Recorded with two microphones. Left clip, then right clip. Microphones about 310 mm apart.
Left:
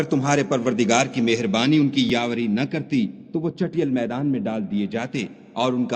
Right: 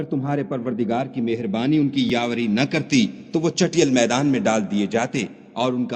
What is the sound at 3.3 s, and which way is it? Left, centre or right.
Speech, right.